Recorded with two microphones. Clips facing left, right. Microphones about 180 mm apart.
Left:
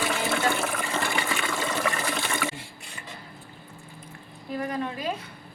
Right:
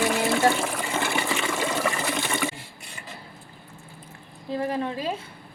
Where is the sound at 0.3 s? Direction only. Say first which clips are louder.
Right 4 dB; 25° right (ahead or behind).